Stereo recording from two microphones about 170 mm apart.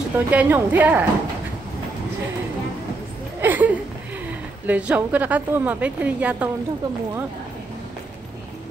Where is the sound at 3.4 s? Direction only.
10° right (ahead or behind).